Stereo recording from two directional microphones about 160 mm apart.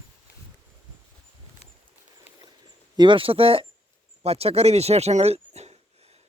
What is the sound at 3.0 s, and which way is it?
Speech, 30° right (ahead or behind).